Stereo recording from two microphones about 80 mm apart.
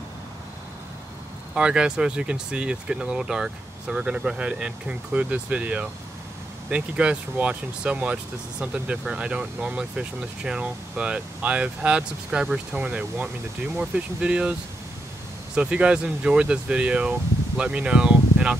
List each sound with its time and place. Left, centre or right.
1.5 s speech: centre